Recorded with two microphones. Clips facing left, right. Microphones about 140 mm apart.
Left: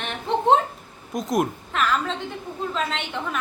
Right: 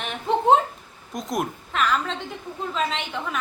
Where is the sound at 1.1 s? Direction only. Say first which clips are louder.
Left 4 dB; centre (ahead or behind).